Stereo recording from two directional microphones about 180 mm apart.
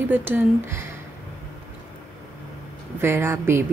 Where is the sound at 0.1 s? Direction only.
10° right (ahead or behind).